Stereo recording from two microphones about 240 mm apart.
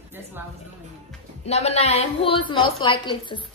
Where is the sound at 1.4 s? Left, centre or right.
Left.